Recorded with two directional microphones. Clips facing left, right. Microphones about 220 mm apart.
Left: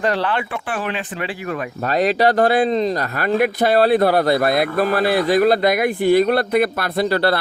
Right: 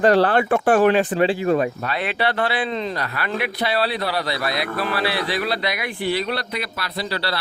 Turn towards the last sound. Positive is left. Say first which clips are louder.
# left 9 dB
turn(degrees=50)  # may be behind; listen again after turning